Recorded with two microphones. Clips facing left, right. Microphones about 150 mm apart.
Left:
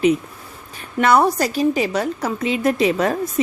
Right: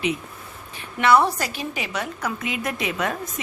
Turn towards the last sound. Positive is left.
turn(degrees=35)  # may be behind; listen again after turning